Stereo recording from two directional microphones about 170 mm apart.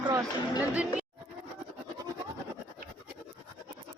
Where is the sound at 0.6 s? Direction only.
10° right (ahead or behind).